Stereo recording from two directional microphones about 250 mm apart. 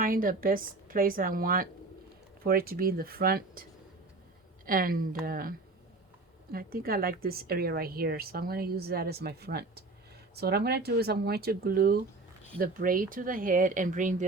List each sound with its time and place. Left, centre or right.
0.0 s a woman's voice: right